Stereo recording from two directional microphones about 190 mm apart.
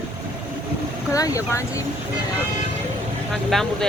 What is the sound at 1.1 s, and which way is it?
Speech, 15° left (ahead or behind).